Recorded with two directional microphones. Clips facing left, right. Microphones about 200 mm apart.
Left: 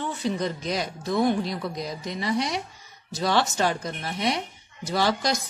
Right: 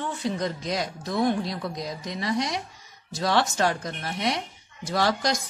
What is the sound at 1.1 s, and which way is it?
Speech, 5° left (ahead or behind).